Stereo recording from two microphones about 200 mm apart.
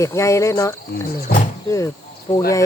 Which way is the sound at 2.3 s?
35° left (ahead or behind).